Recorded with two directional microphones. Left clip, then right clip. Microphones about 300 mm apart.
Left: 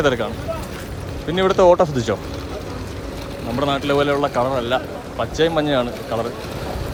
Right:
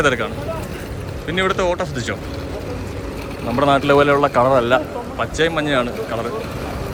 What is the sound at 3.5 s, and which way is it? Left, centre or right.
Speech, centre.